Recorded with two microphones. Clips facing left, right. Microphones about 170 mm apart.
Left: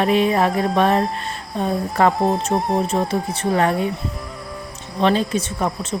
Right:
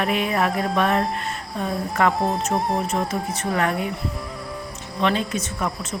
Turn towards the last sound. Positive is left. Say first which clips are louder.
# left 4 dB
turn(degrees=35)  # may be behind; listen again after turning